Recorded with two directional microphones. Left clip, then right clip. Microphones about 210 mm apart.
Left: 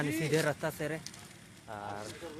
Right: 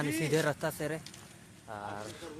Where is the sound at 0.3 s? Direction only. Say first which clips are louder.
Right 1 dB; 5° right (ahead or behind).